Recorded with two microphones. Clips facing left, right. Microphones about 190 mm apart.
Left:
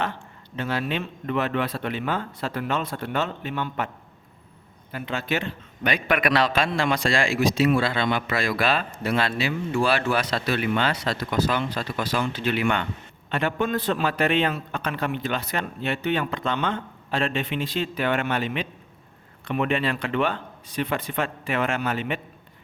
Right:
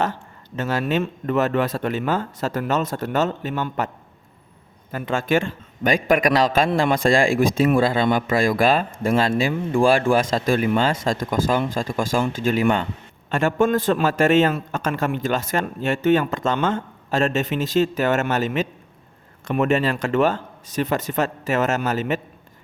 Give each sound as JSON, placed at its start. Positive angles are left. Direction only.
{"t": 0.0, "sound": "a man's voice", "side_deg": -45}
{"t": 4.9, "sound": "a man's voice", "side_deg": -45}